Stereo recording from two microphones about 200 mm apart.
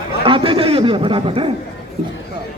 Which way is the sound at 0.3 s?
25° right (ahead or behind).